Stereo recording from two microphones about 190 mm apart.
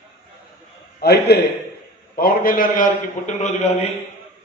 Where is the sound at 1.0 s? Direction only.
55° left (ahead or behind); by 3.9 s 35° left (ahead or behind).